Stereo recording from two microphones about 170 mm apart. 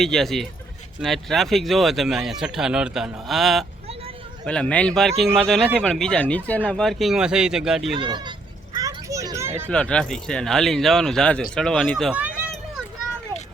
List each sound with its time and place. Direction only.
0.0 s a man's voice: centre (ahead or behind)
7.9 s speech: 25° right (ahead or behind)
8.7 s children playing: 20° right (ahead or behind)
9.6 s speech: 5° left (ahead or behind)